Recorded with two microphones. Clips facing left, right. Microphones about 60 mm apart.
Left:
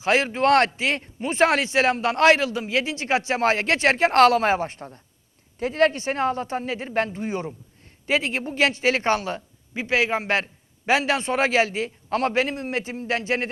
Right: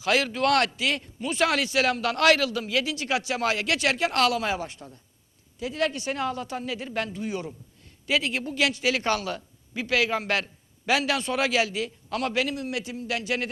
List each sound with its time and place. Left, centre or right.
0.0 s speech: left